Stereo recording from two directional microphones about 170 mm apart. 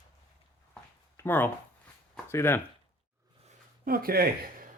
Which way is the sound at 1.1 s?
10° left (ahead or behind).